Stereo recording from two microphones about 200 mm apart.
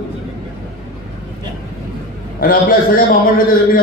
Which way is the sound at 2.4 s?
45° left (ahead or behind).